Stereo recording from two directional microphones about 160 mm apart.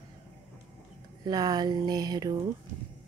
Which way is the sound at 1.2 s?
25° right (ahead or behind).